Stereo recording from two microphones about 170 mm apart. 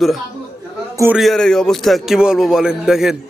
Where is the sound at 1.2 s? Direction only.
Centre (ahead or behind).